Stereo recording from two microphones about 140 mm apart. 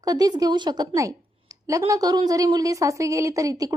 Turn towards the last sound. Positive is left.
turn(degrees=-25)  # may be behind; listen again after turning